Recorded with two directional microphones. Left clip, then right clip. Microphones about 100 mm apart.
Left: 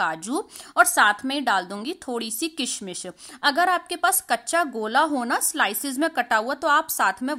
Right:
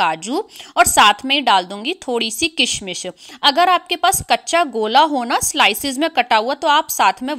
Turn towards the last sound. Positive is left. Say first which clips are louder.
# right 7 dB
turn(degrees=-15)  # may be behind; listen again after turning